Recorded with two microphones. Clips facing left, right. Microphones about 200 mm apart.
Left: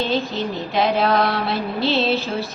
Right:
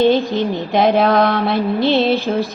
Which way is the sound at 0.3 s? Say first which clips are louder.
Right 5 dB; 55° right (ahead or behind).